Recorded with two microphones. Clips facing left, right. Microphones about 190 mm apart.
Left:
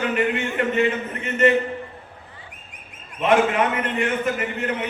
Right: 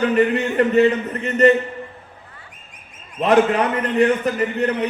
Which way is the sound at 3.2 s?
35° right (ahead or behind).